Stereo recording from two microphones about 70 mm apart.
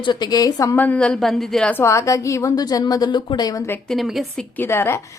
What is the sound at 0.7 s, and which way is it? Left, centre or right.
Speech, left.